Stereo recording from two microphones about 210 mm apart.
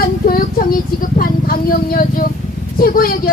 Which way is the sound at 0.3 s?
45° left (ahead or behind).